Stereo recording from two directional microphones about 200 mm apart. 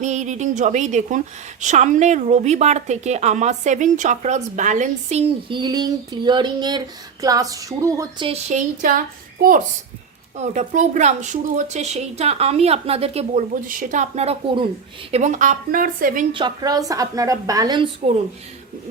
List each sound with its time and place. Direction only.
0.0 s a woman's voice: 35° right (ahead or behind); by 8.3 s 15° right (ahead or behind)
8.3 s a woman's voice: 35° right (ahead or behind)
15.1 s a woman's voice: 35° right (ahead or behind)
16.3 s a woman's voice: 20° right (ahead or behind)